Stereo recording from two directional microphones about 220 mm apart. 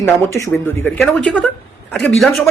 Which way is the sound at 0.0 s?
10° left (ahead or behind).